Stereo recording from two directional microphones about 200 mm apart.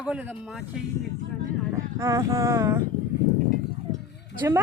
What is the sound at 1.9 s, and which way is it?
Speech, 15° right (ahead or behind).